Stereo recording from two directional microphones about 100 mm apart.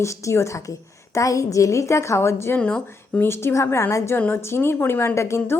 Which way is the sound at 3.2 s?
25° left (ahead or behind).